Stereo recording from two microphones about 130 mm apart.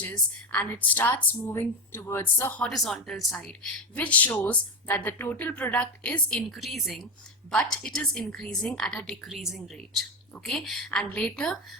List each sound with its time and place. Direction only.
0.5 s speech: 10° left (ahead or behind)
2.6 s a woman's voice: centre (ahead or behind)